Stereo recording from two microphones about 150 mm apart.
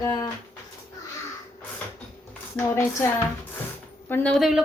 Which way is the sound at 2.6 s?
20° left (ahead or behind).